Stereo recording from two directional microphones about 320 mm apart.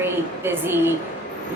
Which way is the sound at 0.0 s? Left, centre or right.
Centre.